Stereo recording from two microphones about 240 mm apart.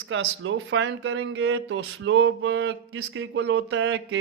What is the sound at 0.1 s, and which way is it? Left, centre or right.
Speech, right.